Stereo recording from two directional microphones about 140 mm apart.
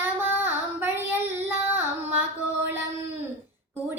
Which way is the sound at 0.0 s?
15° right (ahead or behind).